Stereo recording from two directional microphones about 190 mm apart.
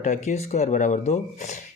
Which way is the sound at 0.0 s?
40° left (ahead or behind).